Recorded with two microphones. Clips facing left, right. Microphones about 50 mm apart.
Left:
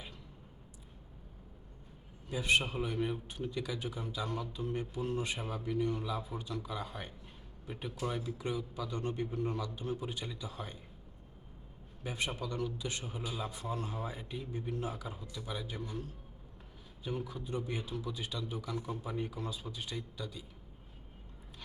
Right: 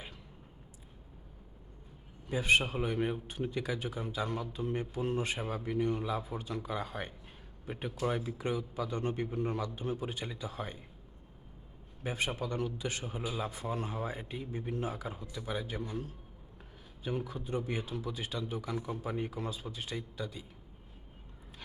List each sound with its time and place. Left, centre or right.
2.3 s a man's voice: right
12.0 s a man's voice: right
14.1 s a man's voice: right
15.8 s a man's voice: centre
17.3 s a man's voice: right
17.8 s a man's voice: right
19.3 s speech: right